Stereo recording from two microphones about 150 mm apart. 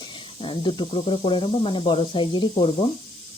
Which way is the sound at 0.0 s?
35° left (ahead or behind).